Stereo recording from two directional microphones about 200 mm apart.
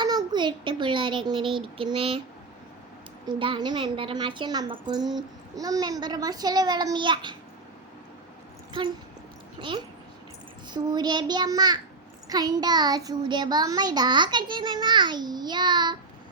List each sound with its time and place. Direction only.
0.0 s a child's voice: 20° right (ahead or behind)
3.3 s a child's voice: 25° right (ahead or behind)
8.8 s a child's voice: 25° right (ahead or behind)